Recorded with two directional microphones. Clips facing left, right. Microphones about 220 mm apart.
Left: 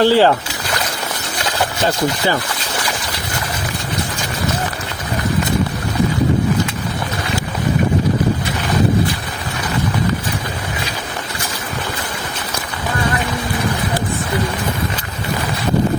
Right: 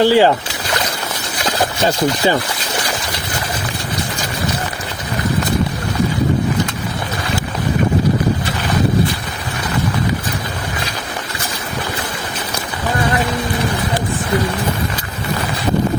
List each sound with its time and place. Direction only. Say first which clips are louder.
0.0 s speech: right 1 dB; 15° right (ahead or behind)
1.8 s speech: right 2 dB; 15° right (ahead or behind)